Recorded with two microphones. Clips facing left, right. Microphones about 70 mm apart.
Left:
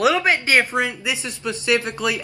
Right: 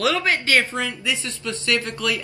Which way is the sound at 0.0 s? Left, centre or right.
Centre.